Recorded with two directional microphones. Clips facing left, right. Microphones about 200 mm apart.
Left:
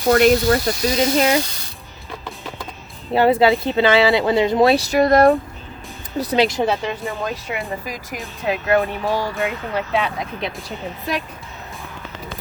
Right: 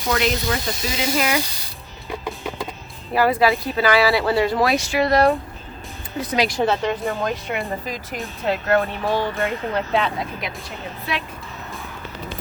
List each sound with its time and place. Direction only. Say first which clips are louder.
0.1 s speech: left 8 dB; 50° left (ahead or behind)
0.4 s speech: left 7 dB; 40° left (ahead or behind)
3.1 s speech: left 3 dB; 25° left (ahead or behind); by 5.3 s 45° left (ahead or behind)
6.1 s speech: left 4 dB; 30° left (ahead or behind)
6.6 s speech: even; 5° left (ahead or behind)
8.4 s speech: left 1 dB; 15° left (ahead or behind)
9.3 s speech: even; centre (ahead or behind)
10.4 s speech: left 4 dB; 30° left (ahead or behind)
11.1 s speech: left 3 dB; 40° left (ahead or behind)